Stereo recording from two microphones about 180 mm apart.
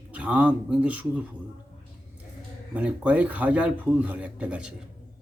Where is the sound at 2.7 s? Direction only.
5° right (ahead or behind).